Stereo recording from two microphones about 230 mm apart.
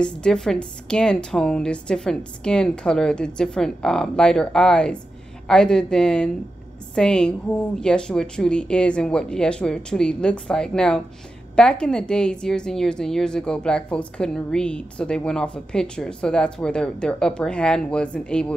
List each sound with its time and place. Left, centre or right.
0.0 s a woman's voice: centre